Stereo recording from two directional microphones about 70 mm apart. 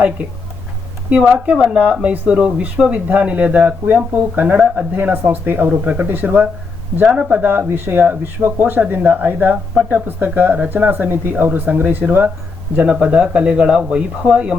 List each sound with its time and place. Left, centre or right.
1.3 s speech: centre